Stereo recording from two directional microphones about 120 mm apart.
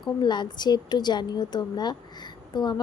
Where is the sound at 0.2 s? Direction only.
40° left (ahead or behind).